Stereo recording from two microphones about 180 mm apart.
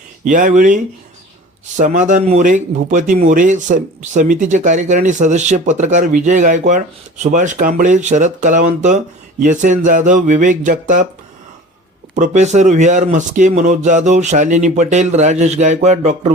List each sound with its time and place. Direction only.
0.3 s speech: 45° right (ahead or behind)
12.1 s speech: 40° right (ahead or behind)